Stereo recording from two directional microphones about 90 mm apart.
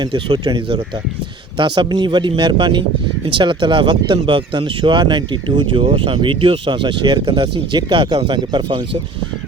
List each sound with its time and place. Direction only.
0.0 s speech: 60° right (ahead or behind)